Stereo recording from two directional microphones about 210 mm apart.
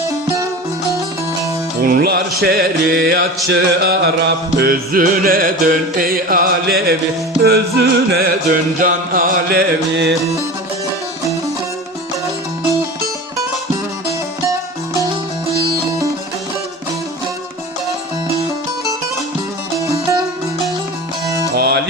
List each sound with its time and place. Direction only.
1.8 s music: 45° right (ahead or behind)
21.5 s music: 50° right (ahead or behind)